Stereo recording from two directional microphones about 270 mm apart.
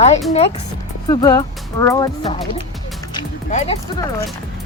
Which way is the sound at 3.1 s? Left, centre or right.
Centre.